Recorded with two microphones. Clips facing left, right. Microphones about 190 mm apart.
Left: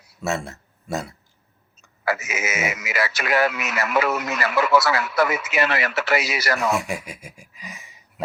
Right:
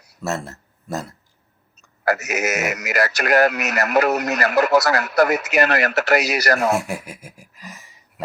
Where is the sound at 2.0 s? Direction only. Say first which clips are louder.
Right 4 dB; 45° right (ahead or behind).